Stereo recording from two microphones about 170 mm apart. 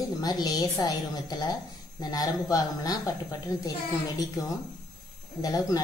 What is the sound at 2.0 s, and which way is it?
A woman's voice, 20° left (ahead or behind).